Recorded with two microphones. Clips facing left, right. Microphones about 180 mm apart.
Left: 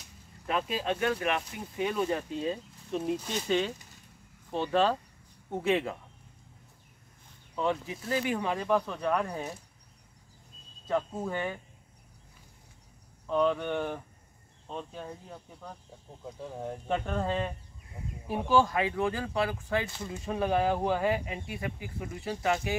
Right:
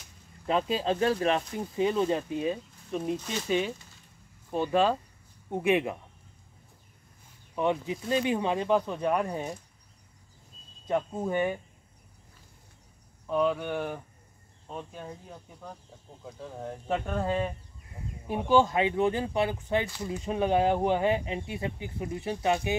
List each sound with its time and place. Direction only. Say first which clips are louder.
0.5 s speech: right 4 dB; 30° right (ahead or behind); by 3.0 s 10° right (ahead or behind)
3.0 s speech: even; centre (ahead or behind); by 5.9 s 15° right (ahead or behind)
7.5 s speech: right 3 dB; 20° right (ahead or behind)
10.9 s speech: right 2 dB; 20° right (ahead or behind)
13.3 s speech: even; 5° right (ahead or behind)
16.3 s speech: left 1 dB; 5° left (ahead or behind)
18.4 s speech: right 2 dB; 20° right (ahead or behind)